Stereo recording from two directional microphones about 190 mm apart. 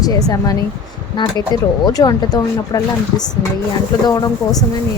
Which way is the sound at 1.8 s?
20° left (ahead or behind).